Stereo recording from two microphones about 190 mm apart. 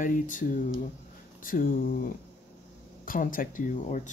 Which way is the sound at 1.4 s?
45° left (ahead or behind).